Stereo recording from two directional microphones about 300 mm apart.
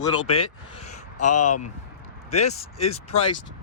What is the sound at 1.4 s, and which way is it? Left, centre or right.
Speech, left.